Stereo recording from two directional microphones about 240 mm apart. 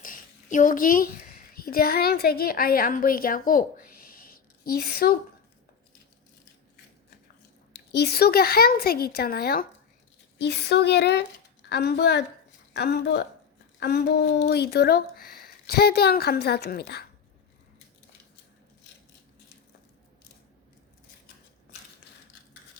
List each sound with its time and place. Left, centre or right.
0.0 s a woman's voice: left
7.9 s speech: left